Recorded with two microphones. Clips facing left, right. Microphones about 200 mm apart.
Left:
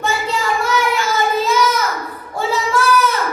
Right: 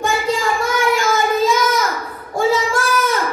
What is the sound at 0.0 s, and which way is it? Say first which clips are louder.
Child singing: right 2 dB; 50° right (ahead or behind).